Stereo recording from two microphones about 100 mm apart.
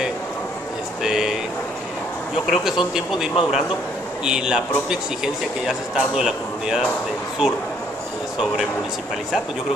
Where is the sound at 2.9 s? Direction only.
5° right (ahead or behind).